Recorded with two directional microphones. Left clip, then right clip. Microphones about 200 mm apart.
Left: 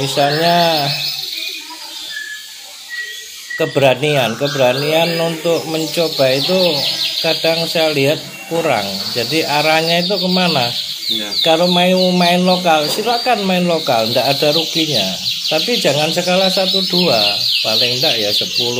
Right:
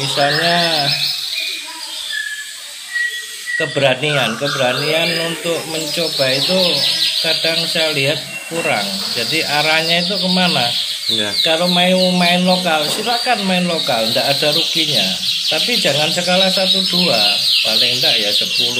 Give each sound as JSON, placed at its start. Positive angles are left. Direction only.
{"t": 0.1, "sound": "speech", "side_deg": 55}
{"t": 3.5, "sound": "speech", "side_deg": 50}